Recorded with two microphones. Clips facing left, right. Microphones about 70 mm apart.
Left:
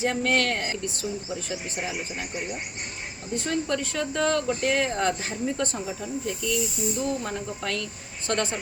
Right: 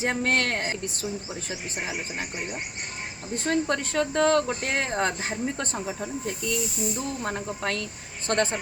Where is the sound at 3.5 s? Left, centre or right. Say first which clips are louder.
Right 3 dB; right.